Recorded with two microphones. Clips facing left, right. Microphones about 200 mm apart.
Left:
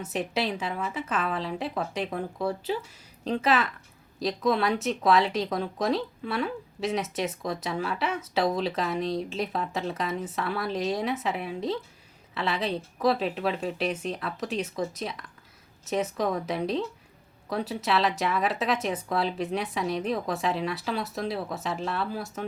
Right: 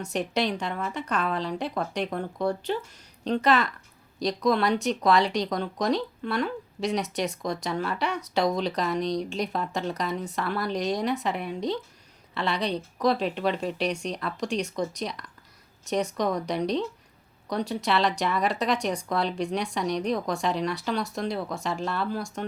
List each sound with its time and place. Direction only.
0.0 s speech: centre (ahead or behind)